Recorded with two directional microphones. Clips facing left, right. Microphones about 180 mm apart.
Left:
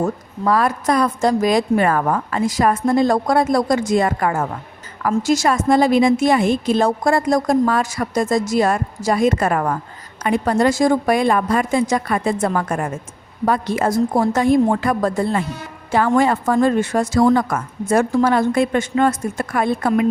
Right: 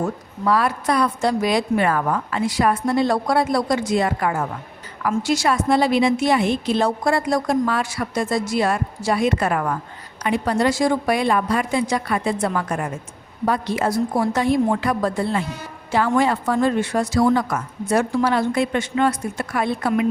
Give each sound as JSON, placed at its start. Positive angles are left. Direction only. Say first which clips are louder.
{"t": 0.4, "sound": "a woman's voice", "louder": "left 2 dB", "side_deg": 45}